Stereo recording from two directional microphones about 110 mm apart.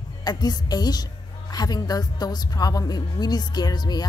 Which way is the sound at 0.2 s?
40° left (ahead or behind).